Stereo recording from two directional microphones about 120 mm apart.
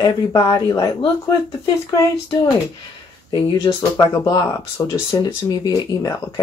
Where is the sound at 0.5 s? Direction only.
35° left (ahead or behind).